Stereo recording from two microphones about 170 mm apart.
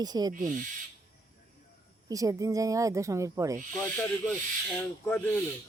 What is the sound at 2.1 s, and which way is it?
Speech, 20° right (ahead or behind).